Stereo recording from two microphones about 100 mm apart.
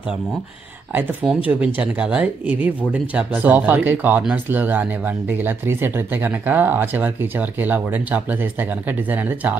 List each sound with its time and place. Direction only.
1.2 s speech: 5° right (ahead or behind)